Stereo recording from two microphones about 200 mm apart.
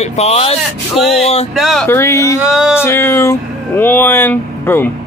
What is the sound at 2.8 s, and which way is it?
Speech, 10° left (ahead or behind).